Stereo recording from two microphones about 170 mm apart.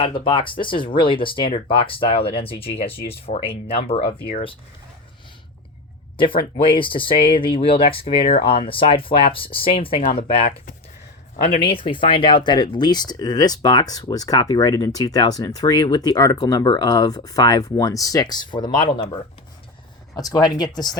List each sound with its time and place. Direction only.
0.0 s speech: 30° left (ahead or behind)
6.1 s speech: 30° left (ahead or behind)
20.1 s speech: 20° left (ahead or behind)